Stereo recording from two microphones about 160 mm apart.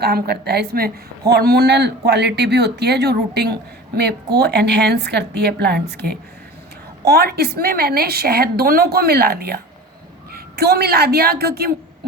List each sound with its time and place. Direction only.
0.0 s a man's voice: 85° right